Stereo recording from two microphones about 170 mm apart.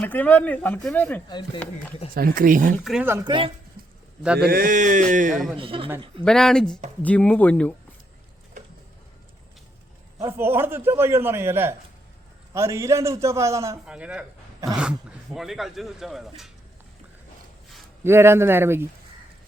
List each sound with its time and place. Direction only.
0.0 s speech: 10° left (ahead or behind)
2.1 s speech: 60° right (ahead or behind)
2.7 s speech: centre (ahead or behind)
3.1 s speech: 25° right (ahead or behind)
4.4 s mantra: 60° right (ahead or behind)
5.5 s speech: 30° right (ahead or behind)
6.2 s speech: 5° left (ahead or behind)
10.2 s a man's voice: 15° right (ahead or behind)
13.8 s speech: 5° right (ahead or behind)
18.0 s a man's voice: 15° right (ahead or behind)